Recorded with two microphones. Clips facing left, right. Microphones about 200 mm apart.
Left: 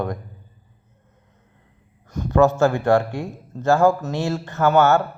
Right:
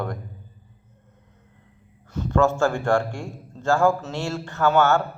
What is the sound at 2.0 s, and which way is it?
A man's voice, 15° left (ahead or behind).